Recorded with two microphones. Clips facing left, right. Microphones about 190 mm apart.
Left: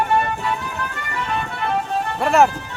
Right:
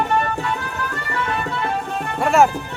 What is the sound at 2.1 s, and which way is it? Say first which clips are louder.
Speech: right 1 dB; centre (ahead or behind).